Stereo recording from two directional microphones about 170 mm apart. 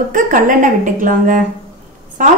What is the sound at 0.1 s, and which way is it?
A woman's voice, 50° right (ahead or behind).